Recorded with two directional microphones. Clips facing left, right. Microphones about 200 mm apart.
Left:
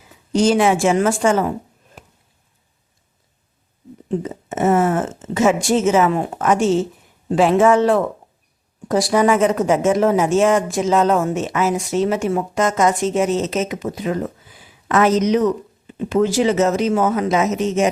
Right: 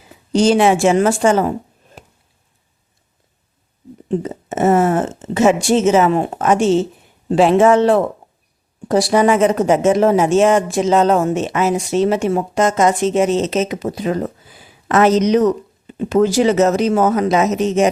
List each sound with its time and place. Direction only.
0.3 s speech: 30° right (ahead or behind)
4.2 s speech: 40° right (ahead or behind)
15.3 s speech: 40° right (ahead or behind)